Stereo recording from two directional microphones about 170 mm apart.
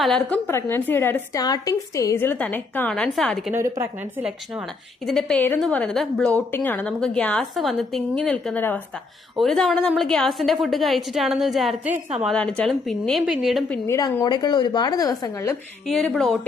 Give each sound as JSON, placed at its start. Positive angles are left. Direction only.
{"t": 0.0, "sound": "a woman's voice", "side_deg": 5}
{"t": 3.5, "sound": "speech", "side_deg": -15}
{"t": 5.0, "sound": "a woman's voice", "side_deg": 5}
{"t": 13.8, "sound": "a woman's voice", "side_deg": 15}
{"t": 15.9, "sound": "a woman's voice", "side_deg": 0}